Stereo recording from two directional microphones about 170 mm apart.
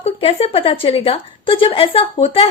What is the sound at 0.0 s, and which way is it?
A woman's voice, 35° left (ahead or behind).